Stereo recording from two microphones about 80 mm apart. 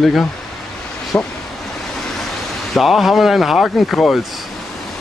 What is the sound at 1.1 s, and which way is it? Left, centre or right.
Speech, left.